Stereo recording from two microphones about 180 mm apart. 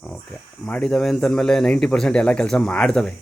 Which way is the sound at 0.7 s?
5° left (ahead or behind).